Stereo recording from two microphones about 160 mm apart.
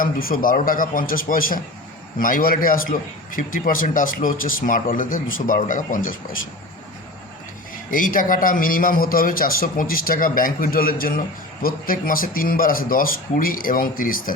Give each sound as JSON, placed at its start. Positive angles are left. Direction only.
{"t": 0.0, "sound": "a man's voice", "side_deg": 60}
{"t": 7.9, "sound": "a man's voice", "side_deg": 60}